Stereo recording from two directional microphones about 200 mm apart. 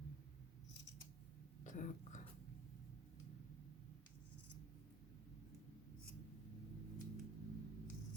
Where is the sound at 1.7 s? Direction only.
40° left (ahead or behind).